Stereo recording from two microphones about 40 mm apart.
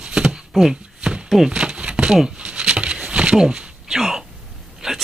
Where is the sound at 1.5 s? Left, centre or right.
Right.